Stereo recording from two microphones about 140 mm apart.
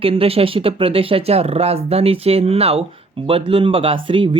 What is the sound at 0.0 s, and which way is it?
Speech, 40° right (ahead or behind).